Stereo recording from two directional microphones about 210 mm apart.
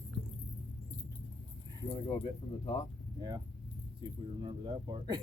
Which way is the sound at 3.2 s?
20° right (ahead or behind).